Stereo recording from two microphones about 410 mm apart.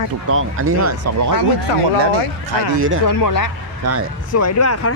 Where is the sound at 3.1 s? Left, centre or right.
Left.